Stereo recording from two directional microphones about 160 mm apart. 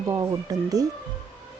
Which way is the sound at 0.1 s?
20° right (ahead or behind).